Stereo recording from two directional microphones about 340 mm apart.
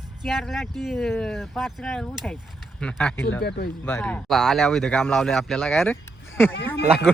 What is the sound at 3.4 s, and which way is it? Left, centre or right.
Speech, left.